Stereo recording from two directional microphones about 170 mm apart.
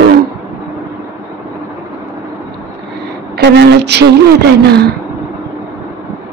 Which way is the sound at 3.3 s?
85° right.